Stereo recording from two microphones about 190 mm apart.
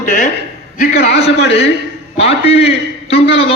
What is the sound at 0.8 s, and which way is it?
Speech, 55° left (ahead or behind).